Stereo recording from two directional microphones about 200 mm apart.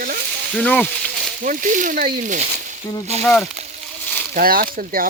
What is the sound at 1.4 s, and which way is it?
Speech, 40° right (ahead or behind).